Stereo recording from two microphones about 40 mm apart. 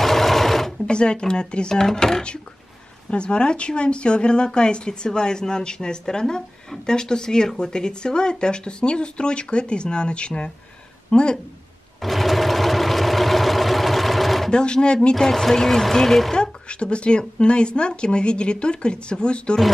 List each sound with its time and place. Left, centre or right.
0.0 s sewing machine: centre
0.8 s a woman's voice: left
3.1 s a woman's voice: left
12.0 s vehicle: centre
14.5 s a woman's voice: left
15.1 s speech: centre
16.3 s a woman's voice: left